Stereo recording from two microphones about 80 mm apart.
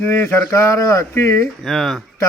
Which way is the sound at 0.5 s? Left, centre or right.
Left.